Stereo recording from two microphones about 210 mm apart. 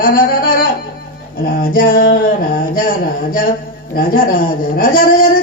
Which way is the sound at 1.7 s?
40° left (ahead or behind).